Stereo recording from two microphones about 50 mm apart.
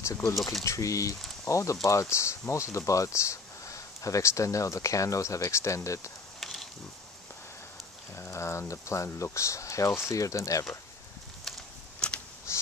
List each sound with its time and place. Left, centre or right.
0.4 s speech: centre
0.7 s speech: left
6.4 s mechanisms: centre
8.2 s speech: left
12.0 s a sound: left
12.5 s crow: left